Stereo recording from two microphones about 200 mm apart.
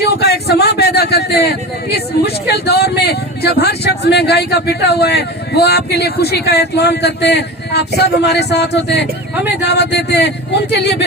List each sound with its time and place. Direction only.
0.0 s a man's voice: 55° left (ahead or behind)